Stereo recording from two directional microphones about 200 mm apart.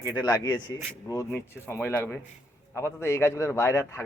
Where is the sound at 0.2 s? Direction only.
20° left (ahead or behind).